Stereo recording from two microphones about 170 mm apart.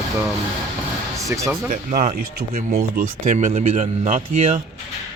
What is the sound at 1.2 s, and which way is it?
Speech, 20° right (ahead or behind).